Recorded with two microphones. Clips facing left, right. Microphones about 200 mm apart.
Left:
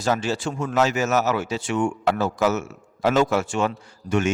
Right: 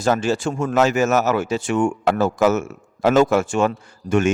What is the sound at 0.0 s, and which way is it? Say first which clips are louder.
A man's voice: right 4 dB; 50° right (ahead or behind).